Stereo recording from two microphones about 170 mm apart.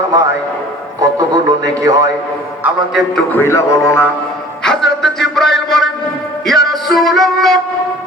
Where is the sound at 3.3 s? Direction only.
15° left (ahead or behind).